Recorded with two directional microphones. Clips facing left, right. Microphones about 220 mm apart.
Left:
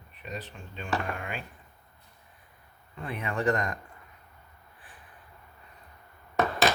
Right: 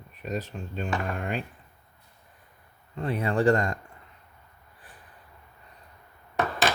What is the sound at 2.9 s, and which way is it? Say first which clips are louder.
Speech: right 7 dB; 35° right (ahead or behind).